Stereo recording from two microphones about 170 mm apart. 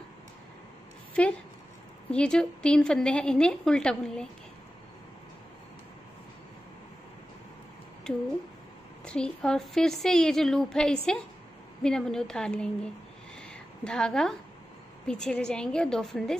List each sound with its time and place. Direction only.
1.2 s a woman's voice: 5° left (ahead or behind)
9.0 s a woman's voice: 5° left (ahead or behind)